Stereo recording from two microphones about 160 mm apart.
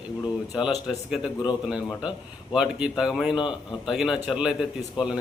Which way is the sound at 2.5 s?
5° right (ahead or behind).